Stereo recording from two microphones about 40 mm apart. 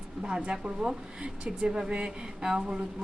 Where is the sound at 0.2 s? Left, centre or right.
Centre.